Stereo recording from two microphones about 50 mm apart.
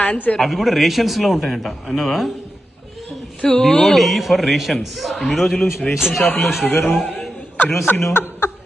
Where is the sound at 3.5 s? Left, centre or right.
Centre.